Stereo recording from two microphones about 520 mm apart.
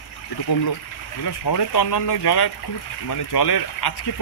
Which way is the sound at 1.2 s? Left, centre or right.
Left.